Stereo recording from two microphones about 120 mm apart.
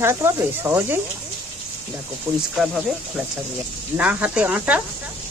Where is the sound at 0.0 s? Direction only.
20° right (ahead or behind).